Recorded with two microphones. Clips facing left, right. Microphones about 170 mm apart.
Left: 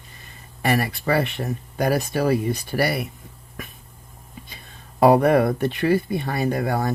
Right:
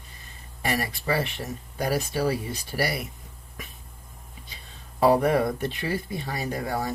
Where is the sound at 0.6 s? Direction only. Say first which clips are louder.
Left 6 dB; 60° left (ahead or behind).